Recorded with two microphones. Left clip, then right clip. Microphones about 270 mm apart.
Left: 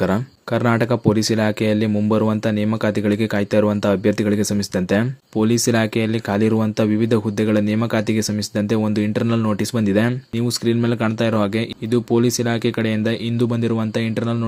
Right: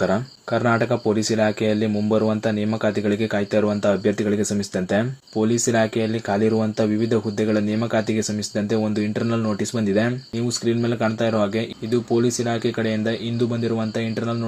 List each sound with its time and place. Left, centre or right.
0.1 s speech: left